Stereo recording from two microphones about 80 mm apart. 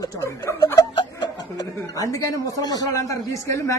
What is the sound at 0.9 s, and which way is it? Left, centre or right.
Speech, left.